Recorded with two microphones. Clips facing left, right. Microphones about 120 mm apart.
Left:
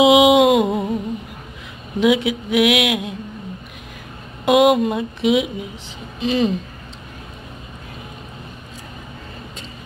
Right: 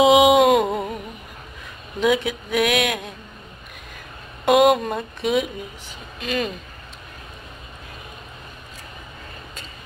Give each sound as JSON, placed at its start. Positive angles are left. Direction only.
{"t": 0.1, "sound": "a sound", "side_deg": 15}
{"t": 2.0, "sound": "a woman's voice", "side_deg": 10}
{"t": 4.5, "sound": "speech", "side_deg": 0}
{"t": 6.1, "sound": "a woman's voice", "side_deg": 25}